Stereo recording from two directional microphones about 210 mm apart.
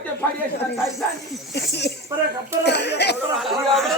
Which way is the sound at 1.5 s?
55° left (ahead or behind).